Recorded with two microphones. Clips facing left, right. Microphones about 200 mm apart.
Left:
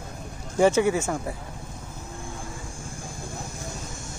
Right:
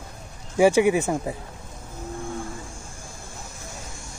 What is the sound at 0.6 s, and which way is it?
Speech, 15° right (ahead or behind).